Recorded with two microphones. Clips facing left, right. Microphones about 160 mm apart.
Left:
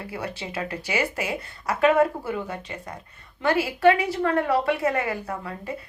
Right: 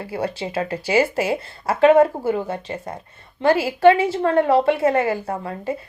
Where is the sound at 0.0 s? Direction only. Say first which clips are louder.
Right 7 dB; 30° right (ahead or behind).